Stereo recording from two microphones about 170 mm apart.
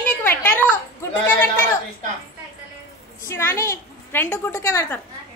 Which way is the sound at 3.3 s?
15° left (ahead or behind).